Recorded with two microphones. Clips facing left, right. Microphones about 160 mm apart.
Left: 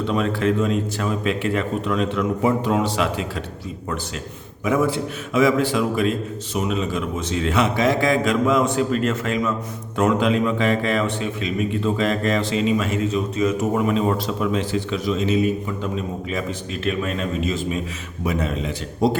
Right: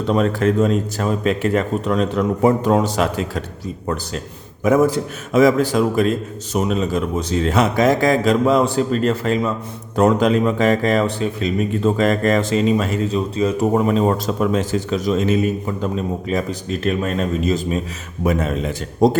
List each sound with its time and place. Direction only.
0.0 s a man's voice: 40° right (ahead or behind)
4.6 s a man's voice: 40° right (ahead or behind)